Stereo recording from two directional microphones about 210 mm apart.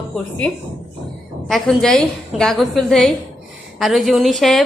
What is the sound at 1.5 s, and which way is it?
A woman's voice, centre (ahead or behind).